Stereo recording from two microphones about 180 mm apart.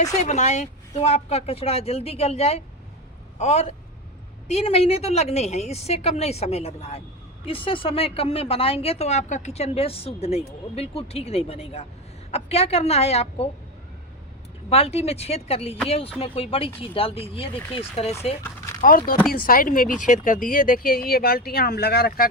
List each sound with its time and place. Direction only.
0.2 s a woman's voice: 40° left (ahead or behind)
14.7 s a woman's voice: 35° left (ahead or behind)
18.8 s speech: 50° left (ahead or behind)